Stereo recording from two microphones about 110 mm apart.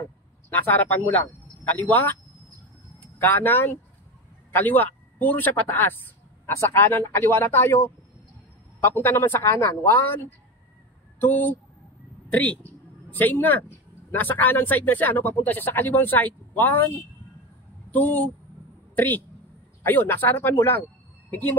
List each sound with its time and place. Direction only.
0.5 s speech: 20° left (ahead or behind)
3.2 s a man's voice: 20° left (ahead or behind)
17.9 s speech: 15° left (ahead or behind)